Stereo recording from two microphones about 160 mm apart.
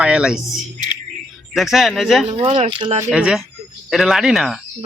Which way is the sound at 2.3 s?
35° right (ahead or behind).